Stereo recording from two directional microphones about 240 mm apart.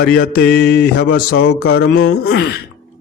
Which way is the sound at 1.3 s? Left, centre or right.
Left.